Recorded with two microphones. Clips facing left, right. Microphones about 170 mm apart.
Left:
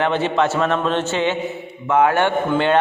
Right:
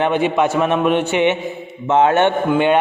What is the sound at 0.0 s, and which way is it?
A man's voice, 15° right (ahead or behind).